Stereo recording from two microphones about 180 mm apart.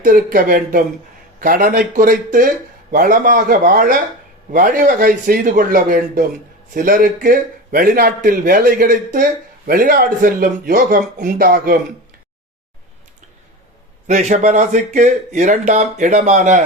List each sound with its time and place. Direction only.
0.0 s speech: 50° right (ahead or behind)
14.1 s speech: 40° right (ahead or behind)